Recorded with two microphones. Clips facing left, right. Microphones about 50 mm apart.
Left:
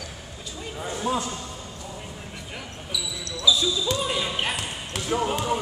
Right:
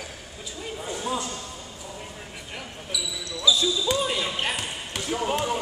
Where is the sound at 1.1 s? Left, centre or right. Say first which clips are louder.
Left 3 dB; left.